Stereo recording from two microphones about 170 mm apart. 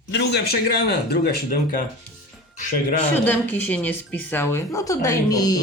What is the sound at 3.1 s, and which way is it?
Speech, 10° left (ahead or behind).